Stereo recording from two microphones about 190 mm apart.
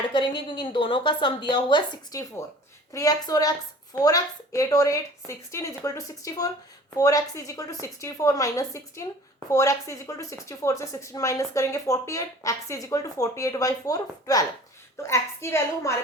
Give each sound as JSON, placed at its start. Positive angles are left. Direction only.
{"t": 0.1, "sound": "a woman's voice", "side_deg": 25}